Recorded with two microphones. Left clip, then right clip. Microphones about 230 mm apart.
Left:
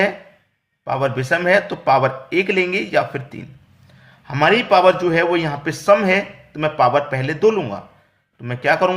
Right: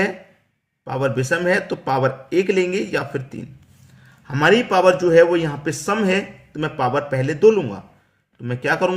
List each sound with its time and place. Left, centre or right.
0.9 s a man's voice: centre